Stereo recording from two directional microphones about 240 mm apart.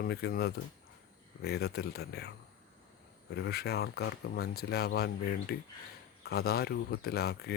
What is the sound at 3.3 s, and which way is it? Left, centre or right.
Speech, left.